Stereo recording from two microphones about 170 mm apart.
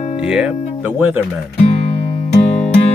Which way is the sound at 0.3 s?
5° right (ahead or behind).